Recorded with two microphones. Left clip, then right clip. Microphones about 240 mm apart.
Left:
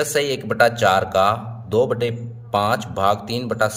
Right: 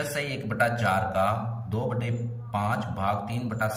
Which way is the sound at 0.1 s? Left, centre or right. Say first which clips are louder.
Left 10 dB; left.